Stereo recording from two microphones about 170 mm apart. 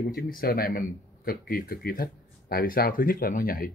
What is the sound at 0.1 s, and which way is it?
Speech, 60° left (ahead or behind).